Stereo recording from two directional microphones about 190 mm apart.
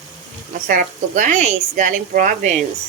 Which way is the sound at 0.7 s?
45° right (ahead or behind).